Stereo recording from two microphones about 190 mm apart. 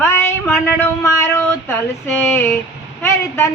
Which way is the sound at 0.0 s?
15° left (ahead or behind).